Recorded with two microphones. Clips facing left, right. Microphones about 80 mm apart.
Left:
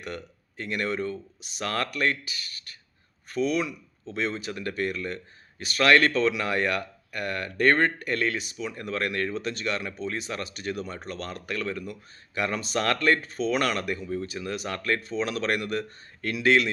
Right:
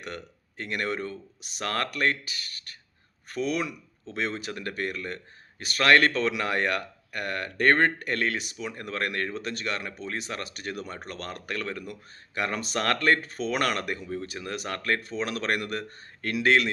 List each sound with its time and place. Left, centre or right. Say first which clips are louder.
0.0 s speech: left 2 dB; right
3.3 s speech: left 3 dB; right
8.5 s speech: left 2 dB; right
14.8 s speech: even; right
15.0 s speech: left 2 dB; right